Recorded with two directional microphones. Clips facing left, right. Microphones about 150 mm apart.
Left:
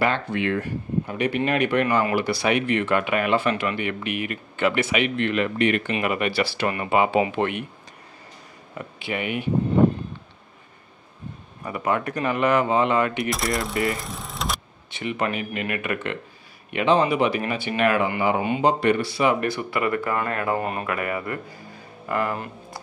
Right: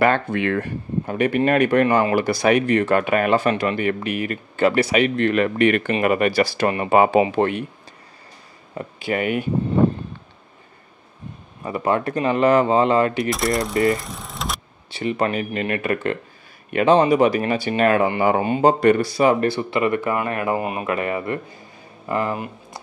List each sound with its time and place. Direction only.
0.0 s speech: 50° right (ahead or behind); by 7.6 s 35° right (ahead or behind)
8.7 s speech: 40° right (ahead or behind)
11.6 s speech: 30° right (ahead or behind)
13.3 s speech: centre (ahead or behind)
13.9 s a sound: centre (ahead or behind)
14.9 s speech: 35° right (ahead or behind); by 20.8 s 10° right (ahead or behind)
20.8 s speech: 25° right (ahead or behind)